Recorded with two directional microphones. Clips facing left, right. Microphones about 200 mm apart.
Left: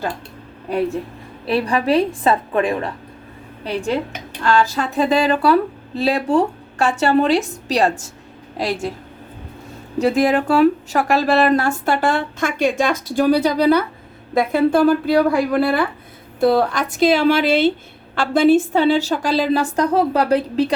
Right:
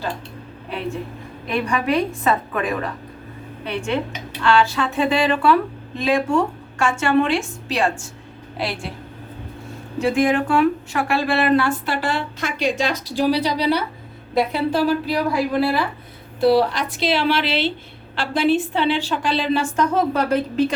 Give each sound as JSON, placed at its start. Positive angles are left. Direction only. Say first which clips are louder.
{"t": 1.5, "sound": "speech", "louder": "left 4 dB", "side_deg": 35}
{"t": 10.0, "sound": "speech", "louder": "left 2 dB", "side_deg": 40}